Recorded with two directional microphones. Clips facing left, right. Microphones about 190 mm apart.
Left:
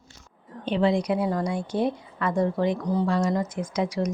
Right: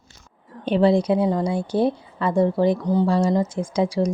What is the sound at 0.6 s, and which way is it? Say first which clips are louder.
A woman's voice: right 5 dB; 40° right (ahead or behind).